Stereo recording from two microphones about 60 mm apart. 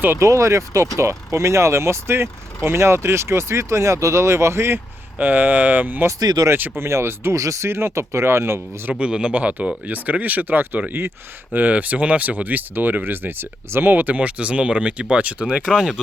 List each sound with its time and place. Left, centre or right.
0.2 s speech: right
5.1 s speech: right
6.1 s speech: right
6.5 s speech: right
6.8 s speech: right
7.3 s speech: right
7.7 s speech: right
8.9 s speech: centre; by 13.9 s right
13.9 s speech: right